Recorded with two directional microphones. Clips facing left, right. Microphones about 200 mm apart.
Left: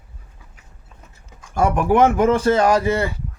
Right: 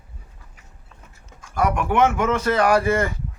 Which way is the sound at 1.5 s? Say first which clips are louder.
Left 4 dB; 30° left (ahead or behind).